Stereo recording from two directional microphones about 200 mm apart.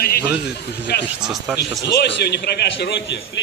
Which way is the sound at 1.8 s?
55° left (ahead or behind).